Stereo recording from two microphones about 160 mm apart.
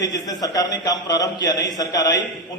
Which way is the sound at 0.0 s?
20° left (ahead or behind).